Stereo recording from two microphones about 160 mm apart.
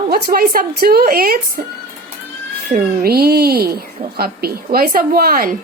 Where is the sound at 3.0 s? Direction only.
75° right (ahead or behind).